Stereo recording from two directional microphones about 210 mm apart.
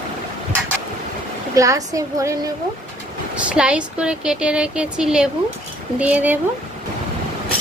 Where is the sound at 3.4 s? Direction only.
5° right (ahead or behind).